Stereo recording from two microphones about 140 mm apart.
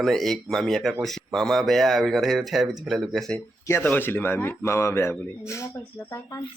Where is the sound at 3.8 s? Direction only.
15° left (ahead or behind).